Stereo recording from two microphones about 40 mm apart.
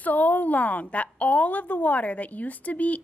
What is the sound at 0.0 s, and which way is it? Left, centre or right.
A woman's voice, left.